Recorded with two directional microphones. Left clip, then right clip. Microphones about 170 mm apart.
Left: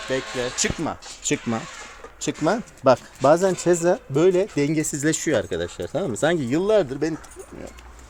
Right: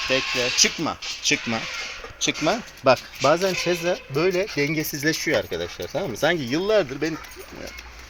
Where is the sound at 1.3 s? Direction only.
50° left (ahead or behind).